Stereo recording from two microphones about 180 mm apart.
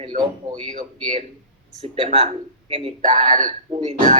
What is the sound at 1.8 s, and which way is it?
Speech, 35° right (ahead or behind).